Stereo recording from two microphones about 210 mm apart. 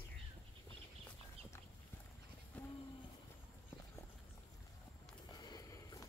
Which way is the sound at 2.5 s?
5° left (ahead or behind).